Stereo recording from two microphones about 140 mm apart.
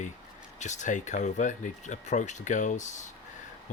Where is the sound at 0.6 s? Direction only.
60° left (ahead or behind).